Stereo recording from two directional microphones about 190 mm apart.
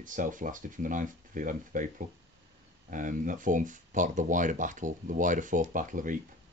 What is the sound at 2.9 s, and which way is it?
Speech, 45° right (ahead or behind).